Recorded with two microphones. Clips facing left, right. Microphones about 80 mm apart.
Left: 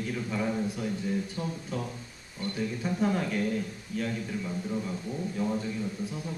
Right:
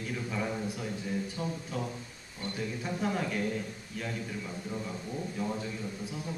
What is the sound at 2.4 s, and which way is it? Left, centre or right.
Speech, right.